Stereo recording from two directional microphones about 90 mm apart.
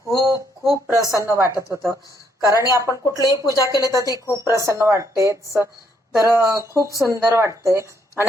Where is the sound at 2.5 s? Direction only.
45° left (ahead or behind).